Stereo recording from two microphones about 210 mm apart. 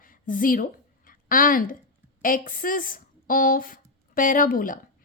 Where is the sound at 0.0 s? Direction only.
40° left (ahead or behind).